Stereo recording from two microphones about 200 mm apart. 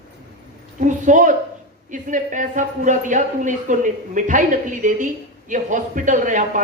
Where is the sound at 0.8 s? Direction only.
40° right (ahead or behind).